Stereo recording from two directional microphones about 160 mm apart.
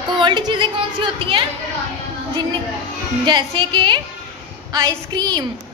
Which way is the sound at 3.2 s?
30° right (ahead or behind).